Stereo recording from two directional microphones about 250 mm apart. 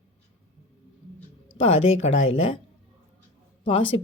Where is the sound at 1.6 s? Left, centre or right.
Left.